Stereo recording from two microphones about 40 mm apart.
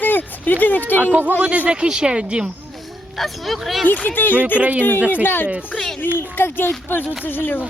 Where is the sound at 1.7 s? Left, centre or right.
Right.